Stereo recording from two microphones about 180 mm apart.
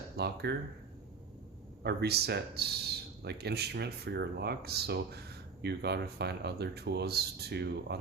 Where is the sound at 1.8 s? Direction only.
65° right (ahead or behind).